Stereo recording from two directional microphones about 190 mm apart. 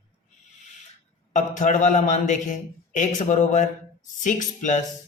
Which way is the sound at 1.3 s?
40° left (ahead or behind).